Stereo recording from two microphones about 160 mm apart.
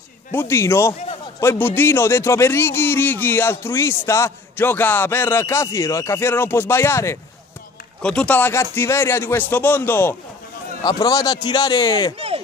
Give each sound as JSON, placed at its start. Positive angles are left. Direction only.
{"t": 0.3, "sound": "a man's voice", "side_deg": 15}
{"t": 8.0, "sound": "a man's voice", "side_deg": 5}
{"t": 10.8, "sound": "a man's voice", "side_deg": 25}